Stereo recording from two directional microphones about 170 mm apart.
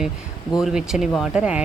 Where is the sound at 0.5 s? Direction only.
5° right (ahead or behind).